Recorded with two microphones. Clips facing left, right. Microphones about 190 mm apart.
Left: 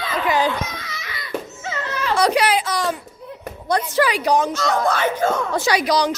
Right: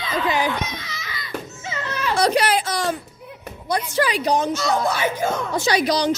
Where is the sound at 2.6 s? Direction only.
25° right (ahead or behind).